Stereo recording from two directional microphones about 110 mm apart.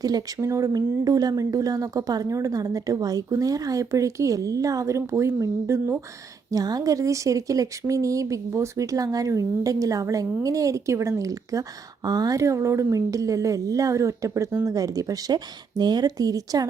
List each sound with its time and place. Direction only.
0.0 s speech: 35° right (ahead or behind)
6.5 s a woman's voice: 35° right (ahead or behind)